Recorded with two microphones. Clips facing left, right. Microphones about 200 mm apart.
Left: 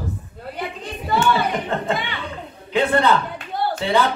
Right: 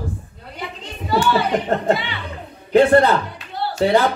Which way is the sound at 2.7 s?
40° right (ahead or behind).